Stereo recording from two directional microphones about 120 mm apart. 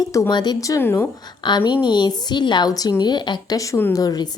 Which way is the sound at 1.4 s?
40° left (ahead or behind).